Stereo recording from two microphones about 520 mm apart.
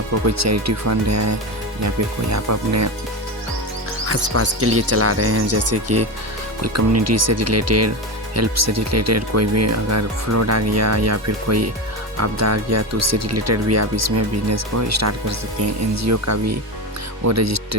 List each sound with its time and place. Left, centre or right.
0.3 s speech: right
4.0 s speech: right